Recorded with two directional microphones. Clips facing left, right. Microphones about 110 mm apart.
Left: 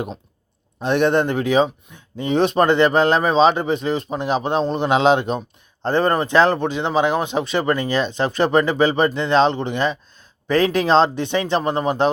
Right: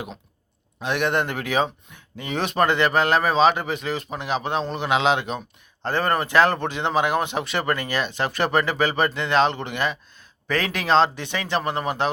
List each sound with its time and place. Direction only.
0.8 s speech: 30° left (ahead or behind)